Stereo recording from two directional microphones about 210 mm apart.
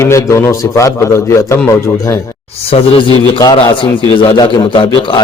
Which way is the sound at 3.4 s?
20° left (ahead or behind).